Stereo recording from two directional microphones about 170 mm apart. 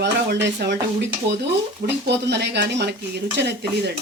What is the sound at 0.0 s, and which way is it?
Speech, 85° right.